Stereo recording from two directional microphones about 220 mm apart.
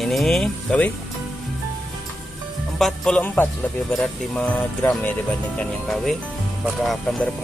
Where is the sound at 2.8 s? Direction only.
Centre (ahead or behind).